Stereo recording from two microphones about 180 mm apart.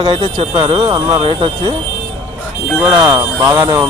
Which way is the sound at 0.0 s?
30° right (ahead or behind).